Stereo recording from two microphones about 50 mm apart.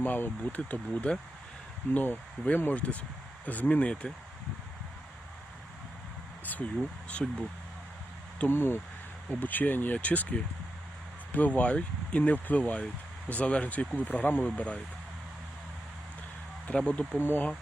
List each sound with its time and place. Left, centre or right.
0.0 s speech: left
6.4 s speech: left
7.1 s speech: left
8.4 s speech: left
9.3 s speech: left
14.4 s speech: left
16.7 s speech: left
17.2 s speech: left